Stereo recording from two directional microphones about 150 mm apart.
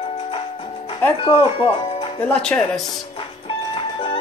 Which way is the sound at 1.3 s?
35° left (ahead or behind).